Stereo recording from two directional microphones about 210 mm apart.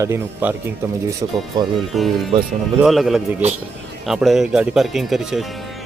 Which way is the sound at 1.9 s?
Centre (ahead or behind).